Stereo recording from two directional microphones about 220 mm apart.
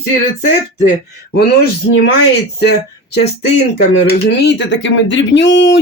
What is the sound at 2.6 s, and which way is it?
Speech, 50° left (ahead or behind).